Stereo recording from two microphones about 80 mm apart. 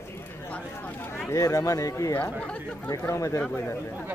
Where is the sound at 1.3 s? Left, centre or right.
Left.